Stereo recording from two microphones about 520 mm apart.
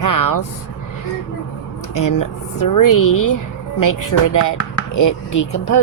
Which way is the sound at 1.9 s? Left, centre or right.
Left.